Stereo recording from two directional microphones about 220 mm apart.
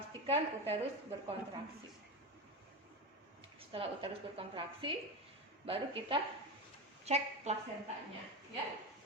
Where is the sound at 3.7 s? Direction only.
25° right (ahead or behind).